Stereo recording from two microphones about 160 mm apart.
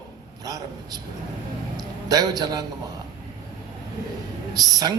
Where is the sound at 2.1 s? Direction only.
25° right (ahead or behind).